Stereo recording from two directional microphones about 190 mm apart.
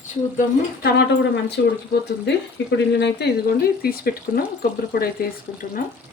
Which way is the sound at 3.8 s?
50° left (ahead or behind).